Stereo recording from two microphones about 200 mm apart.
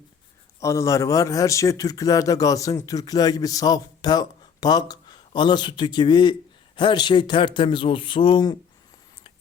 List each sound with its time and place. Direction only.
0.6 s a man's voice: 15° left (ahead or behind)